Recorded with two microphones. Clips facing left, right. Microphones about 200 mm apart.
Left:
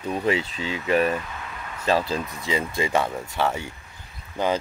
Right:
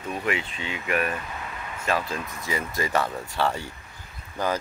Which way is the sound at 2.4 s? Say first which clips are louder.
Left 2 dB; 20° left (ahead or behind).